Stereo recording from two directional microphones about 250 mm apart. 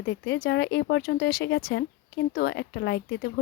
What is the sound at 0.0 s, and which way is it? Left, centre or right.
Speech, left.